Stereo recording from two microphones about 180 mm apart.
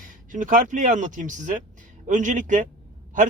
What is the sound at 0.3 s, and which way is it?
A man's voice, 45° right (ahead or behind).